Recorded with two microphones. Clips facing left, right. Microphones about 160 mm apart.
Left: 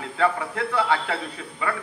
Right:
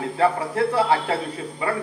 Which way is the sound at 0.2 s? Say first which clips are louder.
Right 3 dB; 30° right (ahead or behind).